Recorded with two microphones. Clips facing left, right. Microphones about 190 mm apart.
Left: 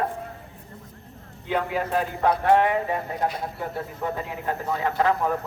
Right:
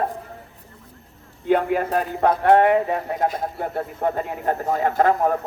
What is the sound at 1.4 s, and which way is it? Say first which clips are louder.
Speech: right 6 dB; 50° right (ahead or behind).